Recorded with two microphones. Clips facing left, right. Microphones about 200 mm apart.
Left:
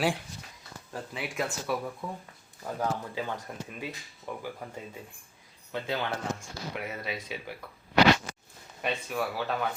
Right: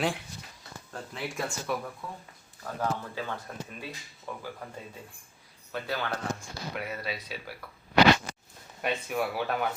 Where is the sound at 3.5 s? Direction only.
15° left (ahead or behind).